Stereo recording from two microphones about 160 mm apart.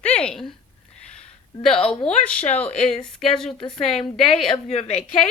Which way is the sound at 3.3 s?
5° left (ahead or behind).